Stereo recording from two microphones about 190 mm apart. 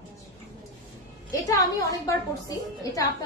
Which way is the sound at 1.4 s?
15° left (ahead or behind).